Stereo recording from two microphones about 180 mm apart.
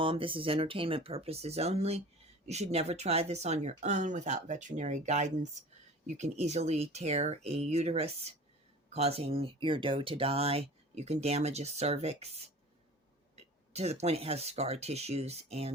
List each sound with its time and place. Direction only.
0.0 s speech: 30° right (ahead or behind)